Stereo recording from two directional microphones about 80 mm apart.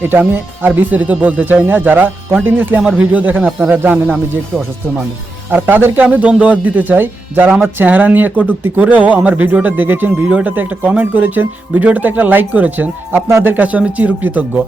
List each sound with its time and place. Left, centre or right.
0.0 s speech: right
5.5 s speech: right